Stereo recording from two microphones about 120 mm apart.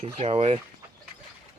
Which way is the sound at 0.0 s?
55° right (ahead or behind).